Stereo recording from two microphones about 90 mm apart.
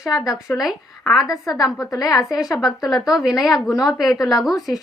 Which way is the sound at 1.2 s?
40° left (ahead or behind).